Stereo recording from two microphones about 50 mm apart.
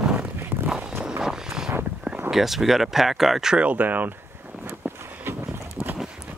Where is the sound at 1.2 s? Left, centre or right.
Centre.